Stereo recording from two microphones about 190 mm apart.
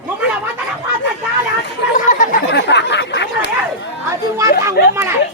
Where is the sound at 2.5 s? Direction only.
65° left (ahead or behind).